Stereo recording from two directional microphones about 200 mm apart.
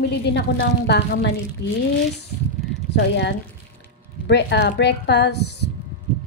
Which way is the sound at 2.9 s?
60° left (ahead or behind).